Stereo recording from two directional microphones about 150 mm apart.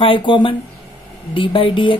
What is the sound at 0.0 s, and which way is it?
Speech, 35° left (ahead or behind).